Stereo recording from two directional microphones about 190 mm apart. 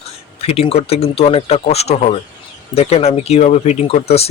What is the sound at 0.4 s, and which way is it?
Speech, 30° left (ahead or behind).